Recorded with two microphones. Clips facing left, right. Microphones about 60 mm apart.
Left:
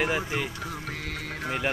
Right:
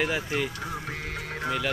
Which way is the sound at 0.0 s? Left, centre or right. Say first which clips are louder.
Even; centre.